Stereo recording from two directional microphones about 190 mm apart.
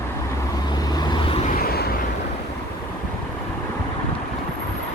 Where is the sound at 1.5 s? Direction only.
55° left (ahead or behind).